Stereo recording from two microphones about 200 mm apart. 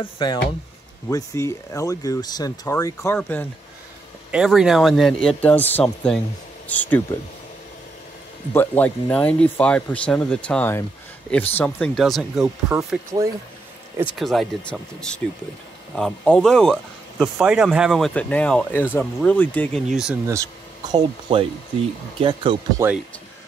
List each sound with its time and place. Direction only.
0.0 s speech: 25° left (ahead or behind); by 3.4 s 10° left (ahead or behind)
4.3 s speech: 5° right (ahead or behind)
8.5 s speech: 10° left (ahead or behind)
12.7 s speech: 15° right (ahead or behind)
14.1 s speech: centre (ahead or behind)
20.9 s speech: 25° right (ahead or behind)